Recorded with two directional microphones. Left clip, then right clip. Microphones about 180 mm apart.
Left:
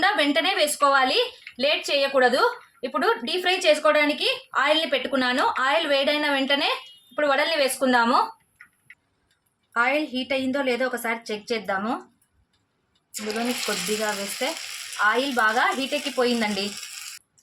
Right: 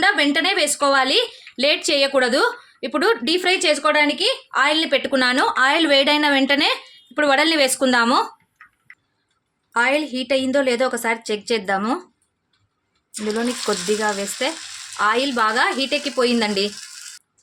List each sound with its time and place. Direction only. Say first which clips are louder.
0.0 s a woman's voice: right 4 dB; 55° right (ahead or behind)
9.7 s a woman's voice: right 4 dB; 70° right (ahead or behind)
13.7 s a woman's voice: right 5 dB; 65° right (ahead or behind)
15.0 s a woman's voice: right 3 dB; 65° right (ahead or behind)